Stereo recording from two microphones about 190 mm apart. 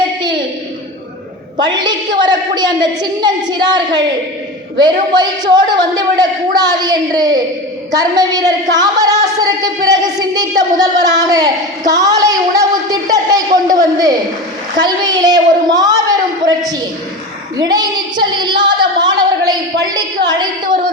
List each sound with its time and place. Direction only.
1.5 s speech: 25° right (ahead or behind)
8.7 s singing: 20° right (ahead or behind)
9.2 s speech: 20° right (ahead or behind)
16.5 s a sound: 20° right (ahead or behind)
17.6 s speech: 20° right (ahead or behind)
18.9 s a sound: 20° right (ahead or behind)